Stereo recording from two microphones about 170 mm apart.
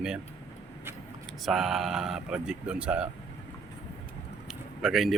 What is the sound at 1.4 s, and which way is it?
Speech, centre (ahead or behind).